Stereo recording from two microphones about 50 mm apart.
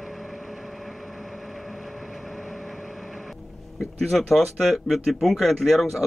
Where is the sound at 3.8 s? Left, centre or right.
Centre.